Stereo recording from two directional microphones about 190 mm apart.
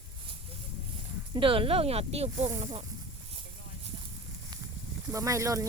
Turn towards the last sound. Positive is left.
turn(degrees=-15)  # may be behind; listen again after turning